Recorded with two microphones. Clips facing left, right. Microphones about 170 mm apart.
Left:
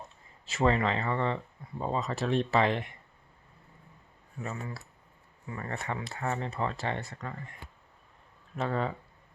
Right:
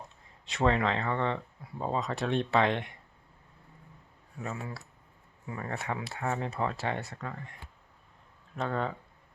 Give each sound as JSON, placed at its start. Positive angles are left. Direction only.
{"t": 0.4, "sound": "speech", "side_deg": 0}
{"t": 4.4, "sound": "speech", "side_deg": 0}